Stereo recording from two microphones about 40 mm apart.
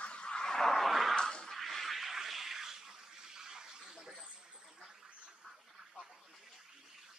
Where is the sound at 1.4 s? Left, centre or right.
Centre; by 4.6 s right.